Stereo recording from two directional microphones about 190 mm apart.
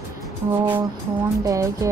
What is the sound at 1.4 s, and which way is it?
Speech, 15° right (ahead or behind).